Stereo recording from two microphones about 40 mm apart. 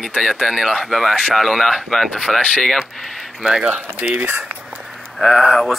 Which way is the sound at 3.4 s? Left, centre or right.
Right.